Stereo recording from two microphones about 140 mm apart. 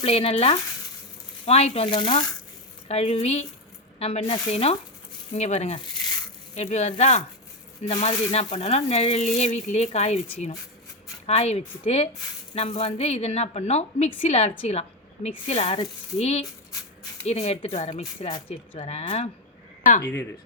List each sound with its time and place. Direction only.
0.0 s speech: 45° left (ahead or behind)
1.9 s speech: 35° left (ahead or behind)
2.8 s speech: 50° left (ahead or behind)
7.9 s speech: 45° left (ahead or behind)
18.3 s speech: 40° left (ahead or behind)